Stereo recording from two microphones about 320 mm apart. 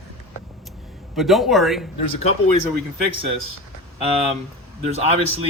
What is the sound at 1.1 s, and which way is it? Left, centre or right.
Speech, centre.